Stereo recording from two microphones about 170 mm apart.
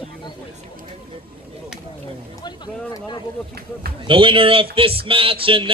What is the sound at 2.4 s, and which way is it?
Speech, 25° left (ahead or behind).